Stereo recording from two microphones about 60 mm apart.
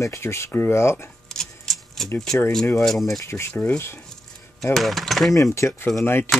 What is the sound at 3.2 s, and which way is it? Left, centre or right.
Speech, left.